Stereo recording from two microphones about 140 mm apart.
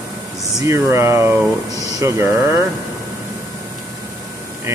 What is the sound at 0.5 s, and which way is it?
Speech, 20° right (ahead or behind).